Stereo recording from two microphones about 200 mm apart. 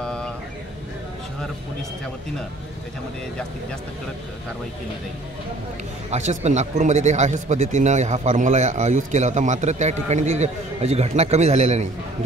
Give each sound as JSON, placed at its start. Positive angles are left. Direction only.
{"t": 0.0, "sound": "vehicle", "side_deg": 5}
{"t": 6.0, "sound": "speech", "side_deg": -35}